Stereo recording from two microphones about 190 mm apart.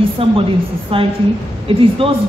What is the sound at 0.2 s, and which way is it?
A man's voice, 30° right (ahead or behind).